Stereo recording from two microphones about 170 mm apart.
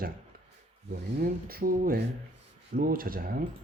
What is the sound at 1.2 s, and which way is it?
Speech, 60° right (ahead or behind).